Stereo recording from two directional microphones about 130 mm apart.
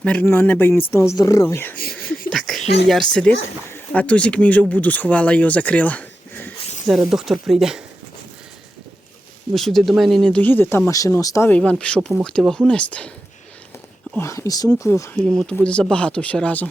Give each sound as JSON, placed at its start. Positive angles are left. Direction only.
{"t": 0.0, "sound": "speech", "side_deg": 10}
{"t": 2.3, "sound": "a sound", "side_deg": 5}
{"t": 2.8, "sound": "speech", "side_deg": 5}
{"t": 6.8, "sound": "speech", "side_deg": 0}
{"t": 9.5, "sound": "speech", "side_deg": 0}
{"t": 11.4, "sound": "speech", "side_deg": 10}
{"t": 14.2, "sound": "speech", "side_deg": 20}
{"t": 15.2, "sound": "speech", "side_deg": 5}